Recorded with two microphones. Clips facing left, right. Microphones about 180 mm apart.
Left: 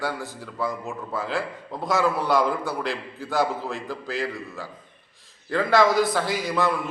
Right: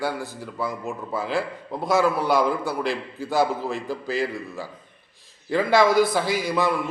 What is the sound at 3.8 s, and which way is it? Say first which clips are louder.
A man's voice: right 3 dB; 15° right (ahead or behind).